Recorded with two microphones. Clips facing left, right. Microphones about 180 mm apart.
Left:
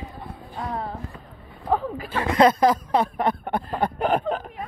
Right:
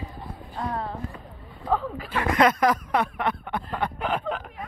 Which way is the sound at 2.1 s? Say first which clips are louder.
Left 3 dB; 30° left (ahead or behind).